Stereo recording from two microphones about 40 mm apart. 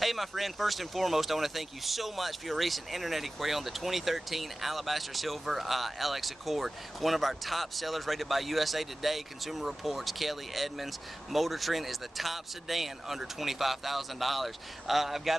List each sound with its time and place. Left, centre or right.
0.0 s speech: centre